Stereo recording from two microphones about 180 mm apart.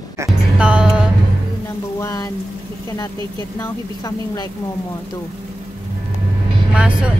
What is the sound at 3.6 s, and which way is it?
Speech, 20° left (ahead or behind).